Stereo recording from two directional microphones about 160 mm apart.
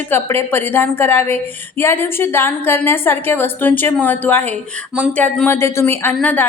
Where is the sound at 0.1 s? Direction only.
15° left (ahead or behind).